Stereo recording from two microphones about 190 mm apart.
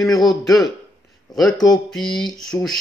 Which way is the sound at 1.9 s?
Centre (ahead or behind).